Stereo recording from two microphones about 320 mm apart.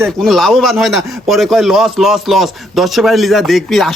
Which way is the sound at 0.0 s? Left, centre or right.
Centre.